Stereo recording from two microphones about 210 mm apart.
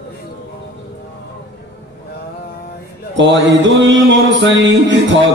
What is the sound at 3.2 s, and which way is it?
Music, 60° right (ahead or behind).